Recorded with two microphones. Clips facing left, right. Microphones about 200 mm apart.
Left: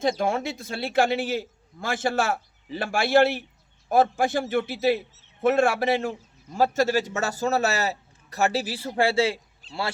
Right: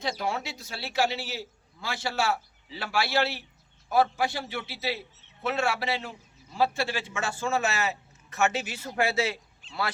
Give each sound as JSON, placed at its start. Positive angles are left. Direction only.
{"t": 0.0, "sound": "a man's voice", "side_deg": 50}